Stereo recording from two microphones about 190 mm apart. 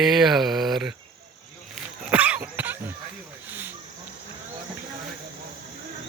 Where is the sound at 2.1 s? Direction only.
10° right (ahead or behind).